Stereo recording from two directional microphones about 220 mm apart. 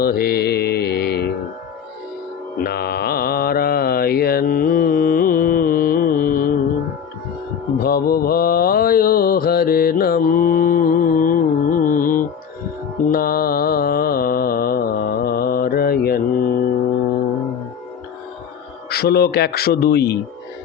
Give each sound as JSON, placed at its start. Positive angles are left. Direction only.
{"t": 0.0, "sound": "mantra", "side_deg": 45}
{"t": 2.6, "sound": "mantra", "side_deg": 45}
{"t": 7.8, "sound": "mantra", "side_deg": 45}
{"t": 18.9, "sound": "speech", "side_deg": 45}